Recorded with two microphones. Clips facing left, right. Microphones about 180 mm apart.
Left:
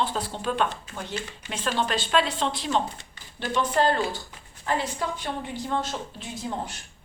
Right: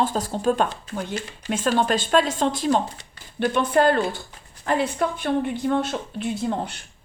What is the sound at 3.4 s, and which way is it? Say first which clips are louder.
A woman's voice: right 5 dB; 55° right (ahead or behind).